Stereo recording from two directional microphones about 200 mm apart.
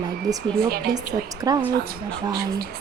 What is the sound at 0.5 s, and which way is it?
Speech, 50° right (ahead or behind).